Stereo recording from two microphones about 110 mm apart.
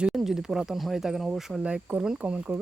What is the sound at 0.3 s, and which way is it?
Speech, 5° right (ahead or behind).